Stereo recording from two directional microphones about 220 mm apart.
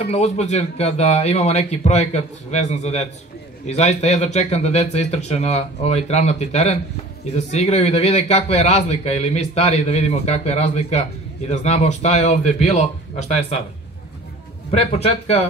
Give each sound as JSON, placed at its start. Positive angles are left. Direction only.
{"t": 0.1, "sound": "a man's voice", "side_deg": 30}
{"t": 14.7, "sound": "a man's voice", "side_deg": 25}